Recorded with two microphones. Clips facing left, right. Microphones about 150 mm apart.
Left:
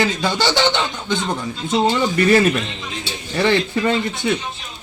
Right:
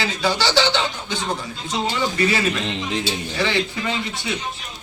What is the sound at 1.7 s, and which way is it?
A man's voice, 55° left (ahead or behind).